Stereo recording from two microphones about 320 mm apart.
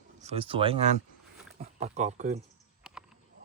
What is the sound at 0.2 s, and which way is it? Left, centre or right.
Speech, centre.